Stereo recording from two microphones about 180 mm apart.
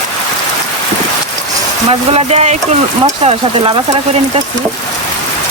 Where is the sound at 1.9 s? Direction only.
35° right (ahead or behind).